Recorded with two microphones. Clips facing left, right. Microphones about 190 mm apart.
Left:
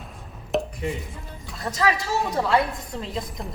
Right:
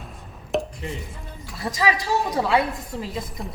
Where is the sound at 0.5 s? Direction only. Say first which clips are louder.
Even; centre (ahead or behind).